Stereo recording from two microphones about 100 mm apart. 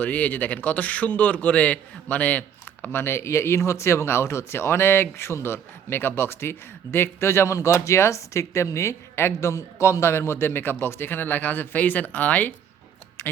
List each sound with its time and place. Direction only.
0.0 s a man's voice: 15° left (ahead or behind)